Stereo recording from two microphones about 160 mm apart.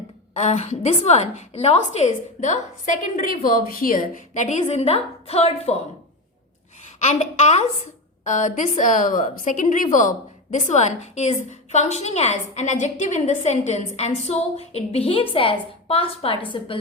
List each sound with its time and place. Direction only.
0.3 s a woman's voice: 45° left (ahead or behind)
7.0 s a woman's voice: 45° left (ahead or behind)